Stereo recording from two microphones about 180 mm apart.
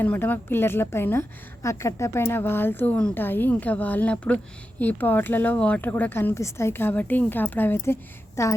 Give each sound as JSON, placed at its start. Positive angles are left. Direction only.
{"t": 0.0, "sound": "speech", "side_deg": 10}